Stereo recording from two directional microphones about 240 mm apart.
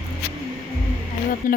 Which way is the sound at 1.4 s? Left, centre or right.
Left.